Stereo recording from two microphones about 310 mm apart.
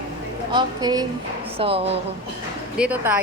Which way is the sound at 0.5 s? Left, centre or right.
Centre.